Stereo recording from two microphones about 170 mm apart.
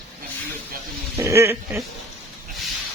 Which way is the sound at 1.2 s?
15° right (ahead or behind).